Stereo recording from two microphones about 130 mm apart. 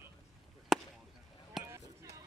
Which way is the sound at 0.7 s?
5° right (ahead or behind).